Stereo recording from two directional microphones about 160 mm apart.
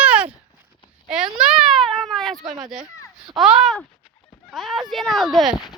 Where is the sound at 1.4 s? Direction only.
5° right (ahead or behind).